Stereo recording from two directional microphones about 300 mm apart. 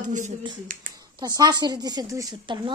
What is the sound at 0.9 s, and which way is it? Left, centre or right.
Speech, centre.